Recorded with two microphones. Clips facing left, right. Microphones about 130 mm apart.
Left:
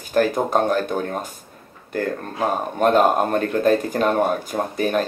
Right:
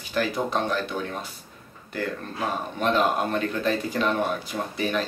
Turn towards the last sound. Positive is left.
turn(degrees=45)  # may be behind; listen again after turning